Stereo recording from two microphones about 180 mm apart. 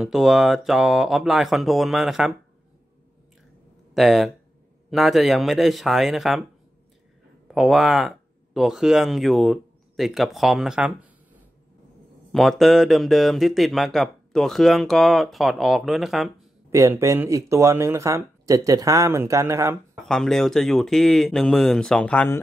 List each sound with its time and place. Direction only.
0.0 s speech: centre (ahead or behind)
3.9 s speech: centre (ahead or behind)
7.5 s speech: centre (ahead or behind)
12.3 s speech: centre (ahead or behind)
16.7 s speech: 15° right (ahead or behind)
20.0 s speech: centre (ahead or behind)